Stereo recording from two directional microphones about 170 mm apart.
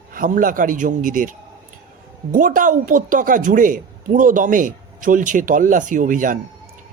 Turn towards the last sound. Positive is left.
turn(degrees=-50)  # may be behind; listen again after turning